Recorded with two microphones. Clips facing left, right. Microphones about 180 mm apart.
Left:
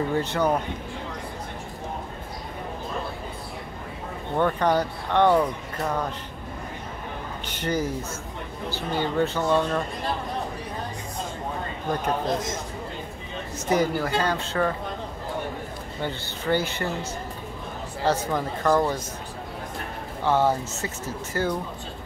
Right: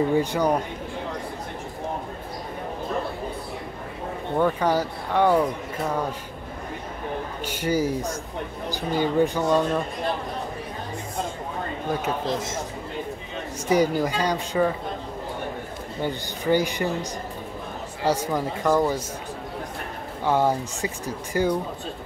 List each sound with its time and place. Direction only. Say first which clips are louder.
0.1 s speech: right 2 dB; 10° right (ahead or behind)
4.4 s speech: even; 10° right (ahead or behind)
7.4 s speech: right 3 dB; 10° right (ahead or behind)
11.9 s speech: left 1 dB; 5° right (ahead or behind)
13.7 s speech: right 2 dB; 15° right (ahead or behind)
16.0 s speech: right 3 dB; 15° right (ahead or behind)
20.2 s speech: even; 10° right (ahead or behind)